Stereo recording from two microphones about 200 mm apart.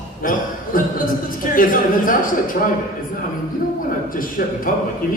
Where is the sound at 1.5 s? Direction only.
45° left (ahead or behind).